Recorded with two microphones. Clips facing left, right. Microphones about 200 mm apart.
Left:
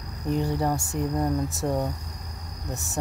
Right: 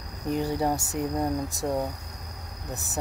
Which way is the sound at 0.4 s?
5° right (ahead or behind).